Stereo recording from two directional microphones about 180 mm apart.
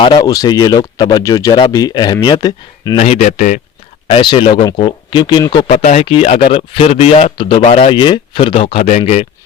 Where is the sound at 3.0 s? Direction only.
40° left (ahead or behind).